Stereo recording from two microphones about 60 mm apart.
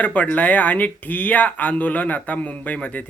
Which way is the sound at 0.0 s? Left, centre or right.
Left.